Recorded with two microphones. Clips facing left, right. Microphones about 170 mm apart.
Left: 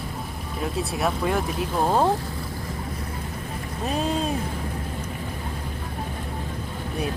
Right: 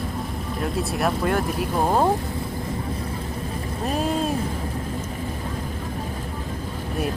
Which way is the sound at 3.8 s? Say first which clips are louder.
Right 1 dB; centre (ahead or behind).